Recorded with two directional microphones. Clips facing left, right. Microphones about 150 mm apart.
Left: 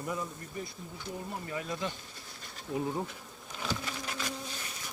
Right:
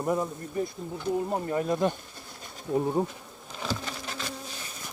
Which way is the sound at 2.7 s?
40° right (ahead or behind).